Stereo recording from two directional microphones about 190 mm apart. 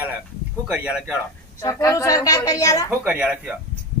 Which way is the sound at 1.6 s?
15° left (ahead or behind).